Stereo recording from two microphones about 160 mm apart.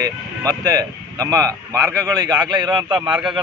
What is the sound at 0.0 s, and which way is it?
Speech, 25° right (ahead or behind).